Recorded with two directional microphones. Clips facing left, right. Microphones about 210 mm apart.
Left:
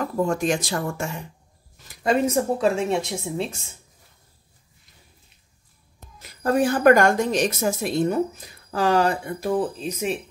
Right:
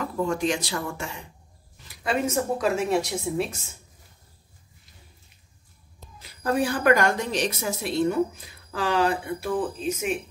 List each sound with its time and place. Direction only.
0.0 s a woman's voice: 45° left (ahead or behind); by 3.7 s 25° left (ahead or behind)
5.9 s a woman's voice: 50° left (ahead or behind)